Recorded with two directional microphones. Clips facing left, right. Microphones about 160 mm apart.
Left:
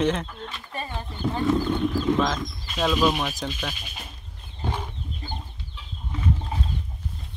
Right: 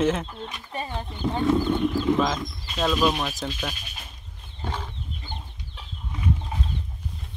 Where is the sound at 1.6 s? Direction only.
Centre (ahead or behind).